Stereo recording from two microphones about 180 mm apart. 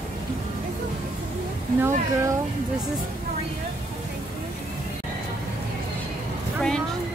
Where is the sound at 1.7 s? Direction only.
15° right (ahead or behind).